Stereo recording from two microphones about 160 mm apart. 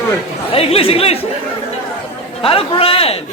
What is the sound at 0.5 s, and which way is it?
Speech, 35° left (ahead or behind).